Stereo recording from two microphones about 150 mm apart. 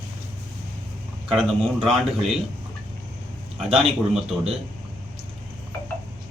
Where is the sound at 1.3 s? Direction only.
Centre (ahead or behind).